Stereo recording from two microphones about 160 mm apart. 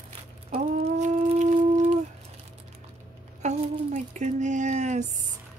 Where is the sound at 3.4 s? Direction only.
45° right (ahead or behind).